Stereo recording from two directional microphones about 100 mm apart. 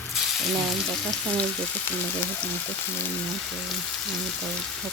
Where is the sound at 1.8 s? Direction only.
20° left (ahead or behind).